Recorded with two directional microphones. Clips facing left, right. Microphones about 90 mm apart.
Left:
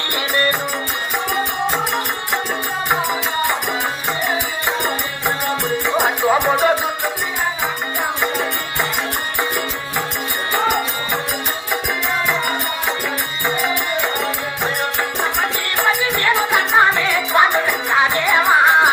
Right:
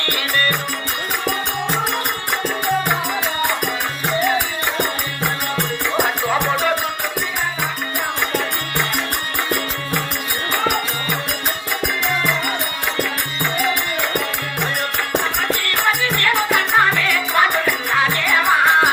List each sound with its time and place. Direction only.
6.2 s music: 20° left (ahead or behind)
8.2 s music: 15° left (ahead or behind)
15.2 s music: 15° left (ahead or behind)